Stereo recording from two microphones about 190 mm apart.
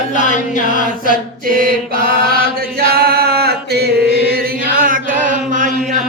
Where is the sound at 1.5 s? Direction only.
50° right (ahead or behind).